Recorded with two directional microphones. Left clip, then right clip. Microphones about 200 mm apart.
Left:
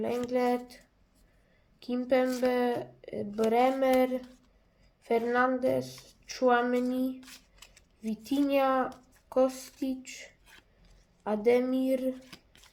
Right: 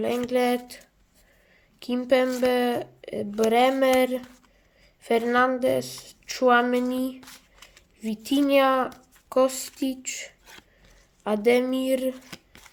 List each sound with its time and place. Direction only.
0.3 s speech: 35° right (ahead or behind)
1.8 s speech: 30° right (ahead or behind)